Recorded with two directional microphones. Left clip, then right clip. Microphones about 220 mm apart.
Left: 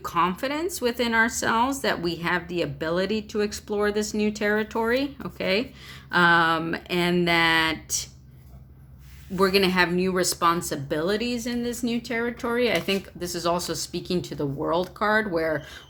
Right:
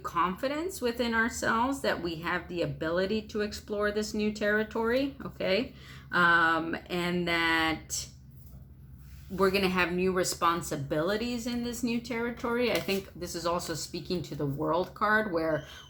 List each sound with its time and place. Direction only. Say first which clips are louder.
0.0 s speech: left 5 dB; 40° left (ahead or behind)
9.3 s speech: left 6 dB; 40° left (ahead or behind)